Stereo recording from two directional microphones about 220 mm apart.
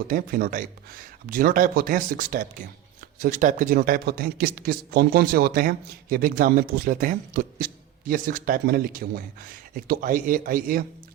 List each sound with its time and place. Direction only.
0.1 s a man's voice: 40° right (ahead or behind)